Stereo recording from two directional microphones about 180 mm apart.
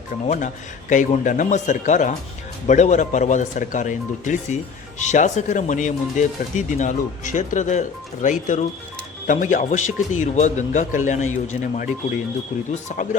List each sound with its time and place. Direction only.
0.3 s speech: 45° left (ahead or behind)